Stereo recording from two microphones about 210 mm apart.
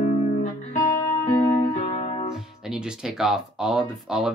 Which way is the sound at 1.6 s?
30° left (ahead or behind).